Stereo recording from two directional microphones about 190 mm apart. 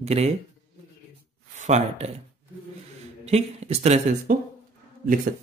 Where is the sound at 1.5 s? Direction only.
35° right (ahead or behind).